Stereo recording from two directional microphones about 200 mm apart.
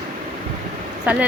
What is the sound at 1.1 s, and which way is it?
Speech, 5° right (ahead or behind).